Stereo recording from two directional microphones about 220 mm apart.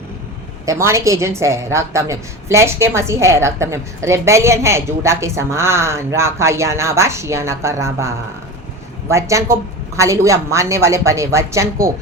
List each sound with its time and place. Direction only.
0.6 s a woman's voice: 15° right (ahead or behind)